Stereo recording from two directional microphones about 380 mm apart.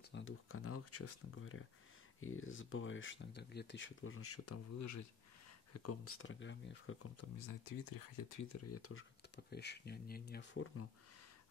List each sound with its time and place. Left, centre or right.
0.1 s speech: left
7.3 s speech: left
8.5 s speech: left
9.5 s speech: left